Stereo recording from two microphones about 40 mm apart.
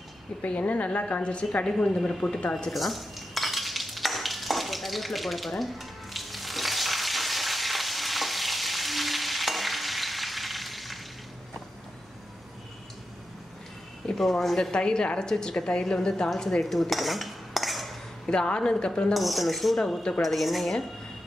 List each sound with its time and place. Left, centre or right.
0.5 s a woman's voice: left
1.7 s speech: centre
2.7 s stir: centre
14.1 s speech: centre
14.7 s a woman's voice: centre
16.3 s cutlery: centre
18.2 s a woman's voice: left
19.1 s cutlery: centre